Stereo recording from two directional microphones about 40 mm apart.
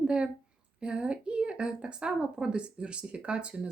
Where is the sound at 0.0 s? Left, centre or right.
Right.